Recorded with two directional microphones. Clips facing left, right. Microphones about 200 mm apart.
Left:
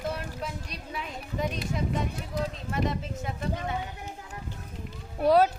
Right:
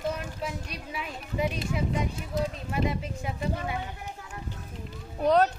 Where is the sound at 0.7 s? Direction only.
5° right (ahead or behind).